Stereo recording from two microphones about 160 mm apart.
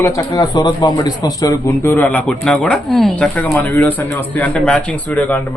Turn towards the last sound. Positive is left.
turn(degrees=10)  # may be behind; listen again after turning